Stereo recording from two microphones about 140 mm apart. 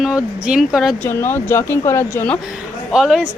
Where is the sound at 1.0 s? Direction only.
15° left (ahead or behind).